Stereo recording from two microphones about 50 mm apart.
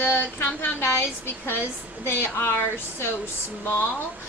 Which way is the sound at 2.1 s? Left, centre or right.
Left.